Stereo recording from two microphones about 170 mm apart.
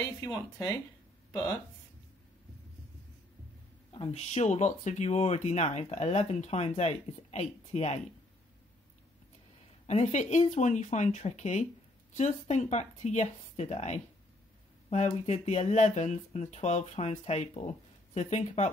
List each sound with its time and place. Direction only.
0.2 s speech: 20° left (ahead or behind)
3.9 s speech: 35° left (ahead or behind)
9.8 s speech: 40° left (ahead or behind)